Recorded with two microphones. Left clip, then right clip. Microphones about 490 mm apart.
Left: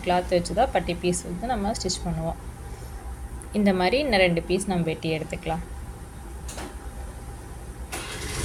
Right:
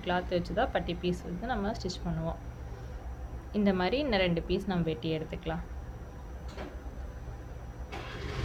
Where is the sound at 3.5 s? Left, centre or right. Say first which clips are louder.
Left 7 dB; right.